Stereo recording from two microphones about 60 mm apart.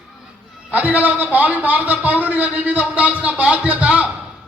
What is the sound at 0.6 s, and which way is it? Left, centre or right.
A man's voice, right.